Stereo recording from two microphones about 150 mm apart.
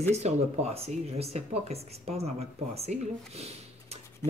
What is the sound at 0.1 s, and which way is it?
Speech, 45° right (ahead or behind).